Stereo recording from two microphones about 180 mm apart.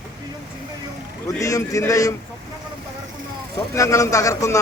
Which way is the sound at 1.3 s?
20° left (ahead or behind).